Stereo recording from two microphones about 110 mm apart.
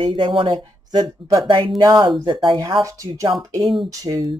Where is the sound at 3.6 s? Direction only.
45° right (ahead or behind).